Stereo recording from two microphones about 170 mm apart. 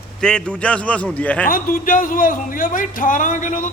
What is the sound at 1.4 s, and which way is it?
A man's voice, 55° left (ahead or behind).